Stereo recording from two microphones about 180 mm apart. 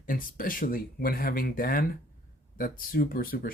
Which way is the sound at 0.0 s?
50° left (ahead or behind).